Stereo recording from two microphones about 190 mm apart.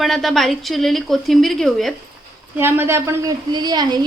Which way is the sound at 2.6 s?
10° right (ahead or behind).